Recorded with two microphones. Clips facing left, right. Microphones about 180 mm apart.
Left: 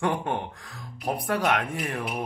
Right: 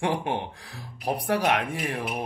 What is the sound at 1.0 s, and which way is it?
Speech, 35° right (ahead or behind).